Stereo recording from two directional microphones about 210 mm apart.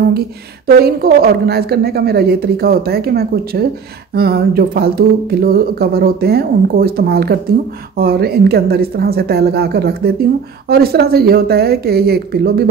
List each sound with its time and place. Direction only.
0.7 s speech: 45° right (ahead or behind)